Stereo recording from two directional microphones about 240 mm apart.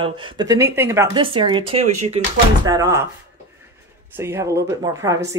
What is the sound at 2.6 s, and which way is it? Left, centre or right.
Speech, centre.